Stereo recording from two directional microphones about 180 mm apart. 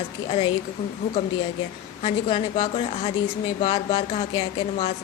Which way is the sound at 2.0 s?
30° left (ahead or behind).